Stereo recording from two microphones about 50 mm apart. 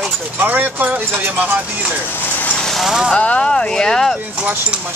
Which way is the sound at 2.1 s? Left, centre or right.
Left.